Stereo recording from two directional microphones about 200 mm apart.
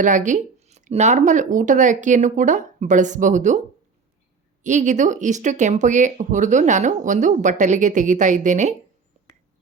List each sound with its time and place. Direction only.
0.0 s speech: 40° right (ahead or behind)
4.6 s speech: 40° right (ahead or behind)
9.2 s whispering: 35° right (ahead or behind)